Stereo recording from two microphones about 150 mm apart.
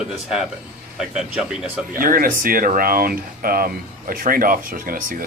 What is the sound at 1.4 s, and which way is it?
Speech, 5° right (ahead or behind).